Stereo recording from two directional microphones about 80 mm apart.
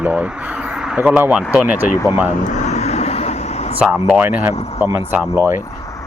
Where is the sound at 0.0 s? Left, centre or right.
Centre.